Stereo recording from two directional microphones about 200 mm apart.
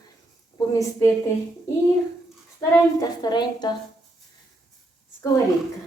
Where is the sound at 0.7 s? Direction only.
15° left (ahead or behind).